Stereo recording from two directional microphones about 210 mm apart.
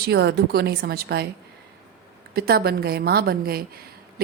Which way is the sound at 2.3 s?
50° right (ahead or behind).